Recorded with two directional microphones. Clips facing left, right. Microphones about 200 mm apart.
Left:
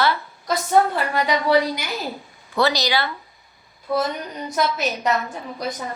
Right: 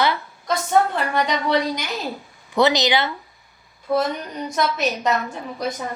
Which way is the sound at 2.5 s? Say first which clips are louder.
Right 3 dB; 20° right (ahead or behind).